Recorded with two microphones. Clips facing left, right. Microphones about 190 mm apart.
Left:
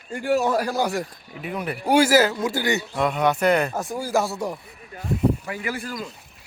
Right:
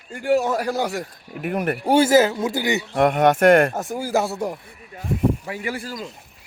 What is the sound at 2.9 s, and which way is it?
Speech, 55° right (ahead or behind).